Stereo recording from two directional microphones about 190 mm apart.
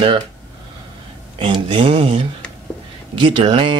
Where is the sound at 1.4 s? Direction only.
25° right (ahead or behind).